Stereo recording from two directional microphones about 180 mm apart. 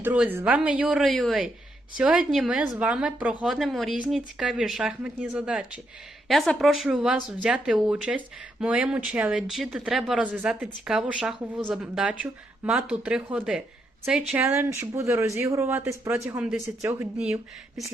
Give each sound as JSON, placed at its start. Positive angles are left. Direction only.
{"t": 0.0, "sound": "speech", "side_deg": -10}